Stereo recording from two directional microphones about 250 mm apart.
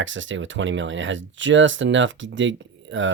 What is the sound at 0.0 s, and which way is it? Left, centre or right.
Speech, right.